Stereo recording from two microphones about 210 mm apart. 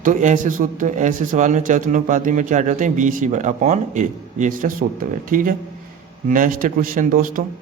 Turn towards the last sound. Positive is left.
turn(degrees=-40)  # may be behind; listen again after turning